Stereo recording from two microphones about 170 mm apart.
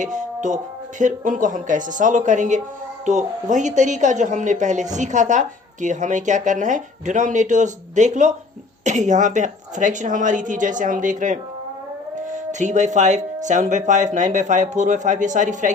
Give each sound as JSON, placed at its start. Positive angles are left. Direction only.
{"t": 0.0, "sound": "speech", "side_deg": -45}